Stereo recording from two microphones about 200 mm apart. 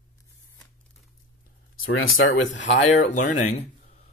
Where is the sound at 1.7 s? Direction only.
90° left.